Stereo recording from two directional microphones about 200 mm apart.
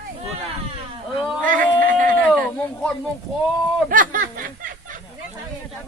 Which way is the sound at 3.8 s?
45° right (ahead or behind).